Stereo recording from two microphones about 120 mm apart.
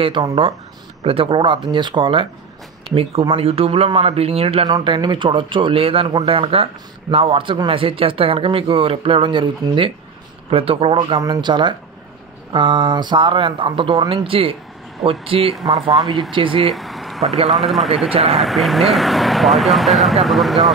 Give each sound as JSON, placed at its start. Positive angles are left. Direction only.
{"t": 0.0, "sound": "speech", "side_deg": -40}
{"t": 1.0, "sound": "speech", "side_deg": -50}
{"t": 4.6, "sound": "speech", "side_deg": -40}
{"t": 11.1, "sound": "speech", "side_deg": -30}
{"t": 16.7, "sound": "a sound", "side_deg": 0}
{"t": 17.5, "sound": "speech", "side_deg": 0}